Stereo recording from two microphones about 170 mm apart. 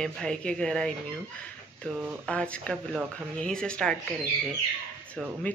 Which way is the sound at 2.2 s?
5° left (ahead or behind).